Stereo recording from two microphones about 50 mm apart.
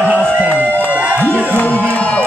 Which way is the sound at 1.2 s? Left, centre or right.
Left.